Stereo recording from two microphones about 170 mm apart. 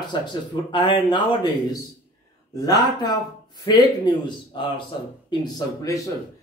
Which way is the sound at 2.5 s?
25° left (ahead or behind).